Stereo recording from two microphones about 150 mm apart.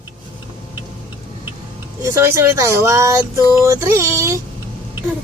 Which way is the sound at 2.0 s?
20° right (ahead or behind).